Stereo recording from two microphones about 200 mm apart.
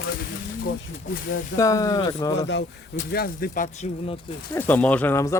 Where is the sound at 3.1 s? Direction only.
50° left (ahead or behind).